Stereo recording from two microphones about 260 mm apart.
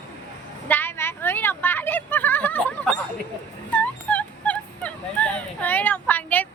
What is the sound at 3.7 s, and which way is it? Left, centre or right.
Fowl, centre.